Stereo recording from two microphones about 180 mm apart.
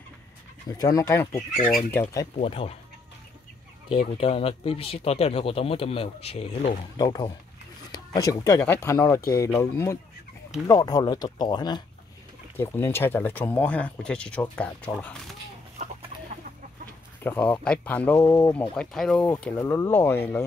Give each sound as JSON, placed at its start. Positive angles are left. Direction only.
{"t": 0.7, "sound": "speech", "side_deg": 20}
{"t": 2.3, "sound": "speech", "side_deg": 35}
{"t": 4.1, "sound": "speech", "side_deg": 30}
{"t": 7.0, "sound": "speech", "side_deg": 20}
{"t": 12.5, "sound": "speech", "side_deg": 15}
{"t": 17.2, "sound": "speech", "side_deg": 10}